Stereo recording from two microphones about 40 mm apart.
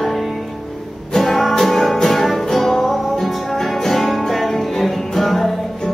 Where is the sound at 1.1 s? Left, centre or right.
Centre.